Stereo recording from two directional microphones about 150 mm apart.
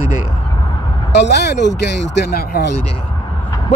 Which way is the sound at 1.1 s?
90° left.